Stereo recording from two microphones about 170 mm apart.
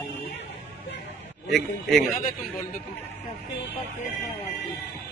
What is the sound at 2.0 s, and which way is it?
Speech, 55° left (ahead or behind).